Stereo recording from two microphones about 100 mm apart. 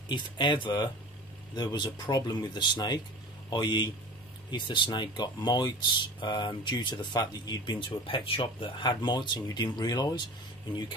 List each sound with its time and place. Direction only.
0.1 s a man's voice: 50° left (ahead or behind)